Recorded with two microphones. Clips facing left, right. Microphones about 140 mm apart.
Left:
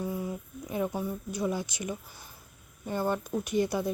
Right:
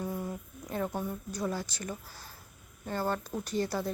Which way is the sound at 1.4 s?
15° left (ahead or behind).